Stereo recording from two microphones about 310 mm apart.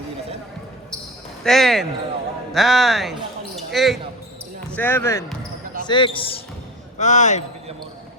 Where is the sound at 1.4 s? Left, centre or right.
Centre.